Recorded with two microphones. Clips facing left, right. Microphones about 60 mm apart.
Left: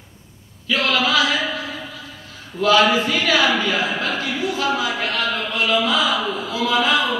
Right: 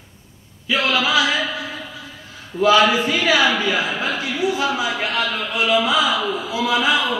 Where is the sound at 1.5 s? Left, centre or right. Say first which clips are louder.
Even; right.